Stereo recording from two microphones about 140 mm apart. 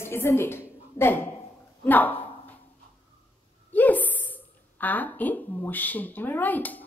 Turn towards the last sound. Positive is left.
turn(degrees=10)  # may be behind; listen again after turning